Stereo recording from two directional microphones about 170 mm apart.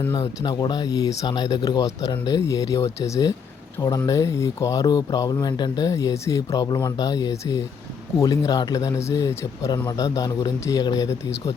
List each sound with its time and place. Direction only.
0.1 s speech: 25° left (ahead or behind)